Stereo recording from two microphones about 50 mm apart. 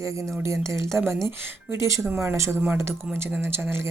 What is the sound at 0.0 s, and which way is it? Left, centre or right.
Speech, right.